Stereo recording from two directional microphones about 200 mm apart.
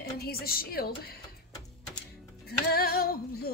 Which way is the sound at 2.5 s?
50° left (ahead or behind).